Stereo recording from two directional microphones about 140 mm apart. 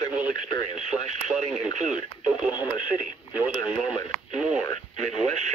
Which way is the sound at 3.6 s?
30° left (ahead or behind).